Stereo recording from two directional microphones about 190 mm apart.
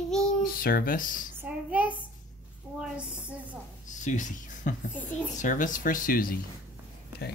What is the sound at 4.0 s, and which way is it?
Speech, 40° left (ahead or behind).